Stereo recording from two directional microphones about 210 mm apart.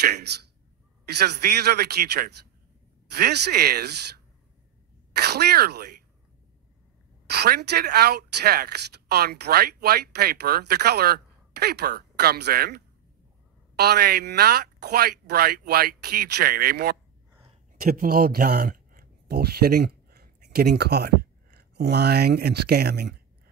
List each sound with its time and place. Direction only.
0.0 s speech: 50° right (ahead or behind)
5.1 s speech: 50° right (ahead or behind)
7.2 s speech: 50° right (ahead or behind)